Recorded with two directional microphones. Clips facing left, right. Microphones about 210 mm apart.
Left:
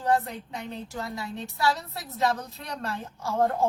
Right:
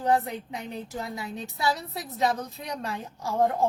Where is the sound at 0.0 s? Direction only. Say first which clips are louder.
Right 1 dB; 15° right (ahead or behind).